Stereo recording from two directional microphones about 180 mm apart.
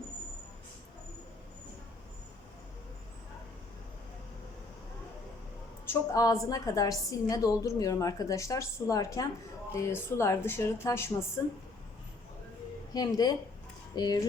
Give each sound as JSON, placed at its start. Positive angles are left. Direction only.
{"t": 5.9, "sound": "a woman's voice", "side_deg": 20}
{"t": 12.9, "sound": "speech", "side_deg": 20}